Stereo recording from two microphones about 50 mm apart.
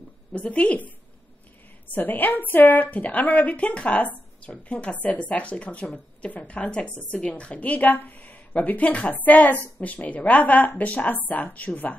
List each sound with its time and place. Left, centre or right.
0.3 s speech: left
1.9 s a woman's voice: left